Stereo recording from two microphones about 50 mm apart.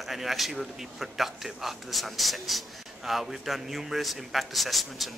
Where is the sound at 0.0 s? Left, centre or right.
Centre.